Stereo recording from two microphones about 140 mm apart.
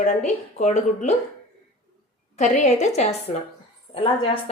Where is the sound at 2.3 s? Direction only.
55° left (ahead or behind).